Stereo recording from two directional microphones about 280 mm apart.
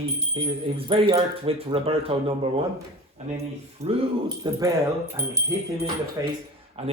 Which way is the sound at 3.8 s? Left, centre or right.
Centre.